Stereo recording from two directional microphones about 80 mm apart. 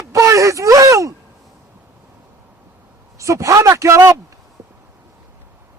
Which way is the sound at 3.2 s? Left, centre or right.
Right.